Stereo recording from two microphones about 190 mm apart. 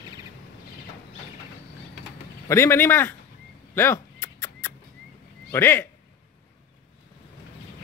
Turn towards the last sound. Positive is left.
turn(degrees=10)  # may be behind; listen again after turning